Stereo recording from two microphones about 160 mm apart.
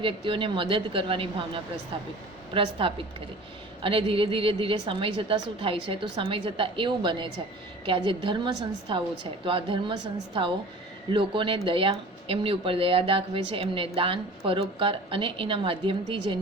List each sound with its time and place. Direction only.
0.0 s a woman's voice: 30° right (ahead or behind)